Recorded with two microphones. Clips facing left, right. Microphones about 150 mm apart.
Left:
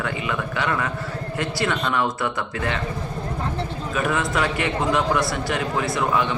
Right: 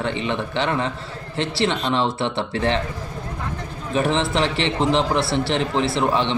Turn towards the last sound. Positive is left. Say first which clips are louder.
# right 2 dB
turn(degrees=-25)  # may be behind; listen again after turning